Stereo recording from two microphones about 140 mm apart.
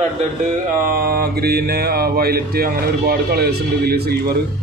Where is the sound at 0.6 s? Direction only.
80° right.